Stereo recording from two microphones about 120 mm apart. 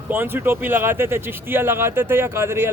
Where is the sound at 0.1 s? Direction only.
20° right (ahead or behind).